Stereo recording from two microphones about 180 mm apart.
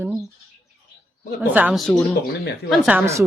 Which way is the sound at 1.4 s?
10° right (ahead or behind).